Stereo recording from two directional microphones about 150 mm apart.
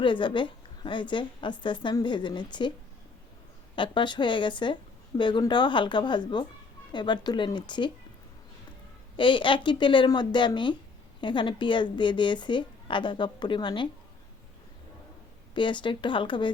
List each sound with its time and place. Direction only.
0.0 s a woman's voice: 30° left (ahead or behind)
3.8 s a woman's voice: 30° left (ahead or behind)
9.1 s a woman's voice: 35° left (ahead or behind)
15.5 s a woman's voice: 30° left (ahead or behind)